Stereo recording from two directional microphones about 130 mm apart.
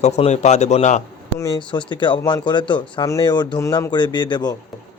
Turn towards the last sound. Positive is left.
turn(degrees=35)  # may be behind; listen again after turning